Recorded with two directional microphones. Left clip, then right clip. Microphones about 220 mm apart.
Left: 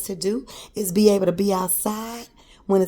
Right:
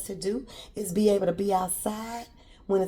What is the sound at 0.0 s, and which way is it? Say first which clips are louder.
Speech: left 6 dB; 50° left (ahead or behind).